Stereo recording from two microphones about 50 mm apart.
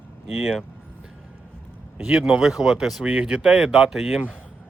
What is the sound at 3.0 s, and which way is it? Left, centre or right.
Speech, right.